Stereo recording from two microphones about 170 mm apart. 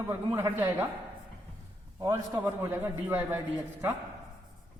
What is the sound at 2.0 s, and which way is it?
A man's voice, 15° right (ahead or behind).